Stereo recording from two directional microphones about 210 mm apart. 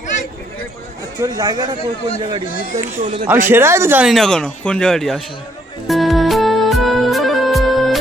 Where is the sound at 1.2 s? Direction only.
15° right (ahead or behind).